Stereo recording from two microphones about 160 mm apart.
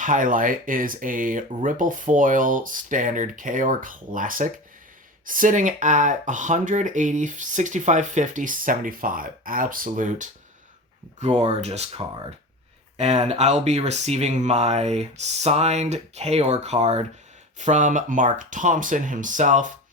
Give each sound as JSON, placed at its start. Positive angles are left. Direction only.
{"t": 0.0, "sound": "speech", "side_deg": -55}